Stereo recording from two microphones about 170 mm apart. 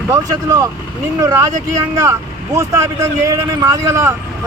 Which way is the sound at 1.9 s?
20° right (ahead or behind).